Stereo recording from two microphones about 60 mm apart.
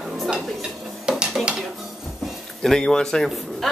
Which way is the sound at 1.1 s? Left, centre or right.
Centre.